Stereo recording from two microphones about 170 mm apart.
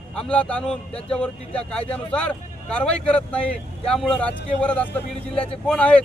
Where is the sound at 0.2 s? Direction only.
5° left (ahead or behind).